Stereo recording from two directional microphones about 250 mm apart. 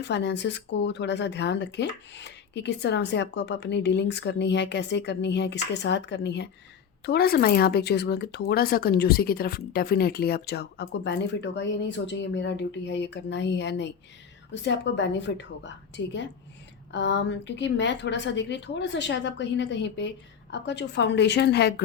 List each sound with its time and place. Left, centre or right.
0.0 s speech: left